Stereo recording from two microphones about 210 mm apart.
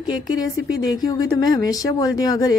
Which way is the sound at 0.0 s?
20° left (ahead or behind).